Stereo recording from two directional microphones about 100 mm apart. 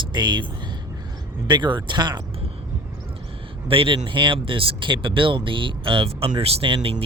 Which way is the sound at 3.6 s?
65° right (ahead or behind).